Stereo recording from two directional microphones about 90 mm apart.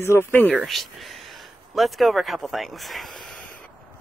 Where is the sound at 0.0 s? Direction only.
25° left (ahead or behind).